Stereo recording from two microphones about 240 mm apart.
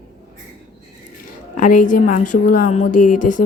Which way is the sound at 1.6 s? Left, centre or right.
Left.